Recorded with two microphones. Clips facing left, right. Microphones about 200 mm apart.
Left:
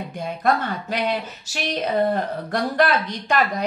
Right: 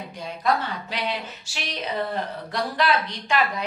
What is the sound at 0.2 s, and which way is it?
A woman's voice, 50° left (ahead or behind).